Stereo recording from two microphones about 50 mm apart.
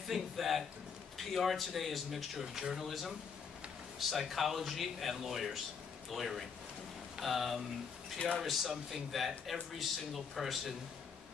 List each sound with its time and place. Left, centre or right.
0.1 s a man's voice: centre
2.4 s a man's voice: centre